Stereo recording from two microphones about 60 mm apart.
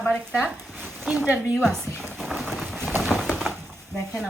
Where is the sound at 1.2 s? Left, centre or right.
Right.